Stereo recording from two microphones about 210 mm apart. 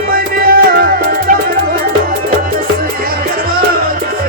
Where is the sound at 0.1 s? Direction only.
45° right (ahead or behind).